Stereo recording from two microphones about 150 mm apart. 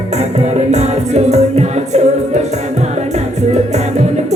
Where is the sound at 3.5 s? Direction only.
50° right (ahead or behind).